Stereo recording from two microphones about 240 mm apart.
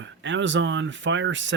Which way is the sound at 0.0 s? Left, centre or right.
Right.